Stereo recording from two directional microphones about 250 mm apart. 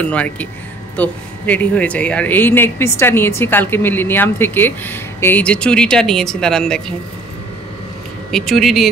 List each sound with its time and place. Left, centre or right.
0.0 s speech: centre
8.3 s speech: centre